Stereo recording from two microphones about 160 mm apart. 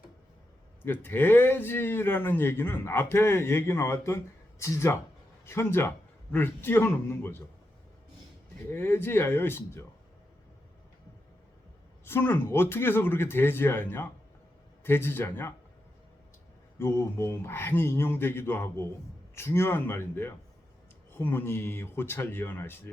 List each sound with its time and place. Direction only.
0.9 s speech: 10° left (ahead or behind)
8.7 s speech: 15° left (ahead or behind)
12.0 s speech: 15° left (ahead or behind)
16.7 s speech: 15° left (ahead or behind)